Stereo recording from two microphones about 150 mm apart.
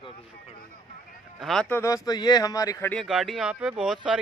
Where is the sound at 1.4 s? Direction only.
5° left (ahead or behind).